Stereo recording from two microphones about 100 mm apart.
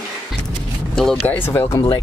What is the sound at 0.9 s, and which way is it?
Speech, 5° left (ahead or behind).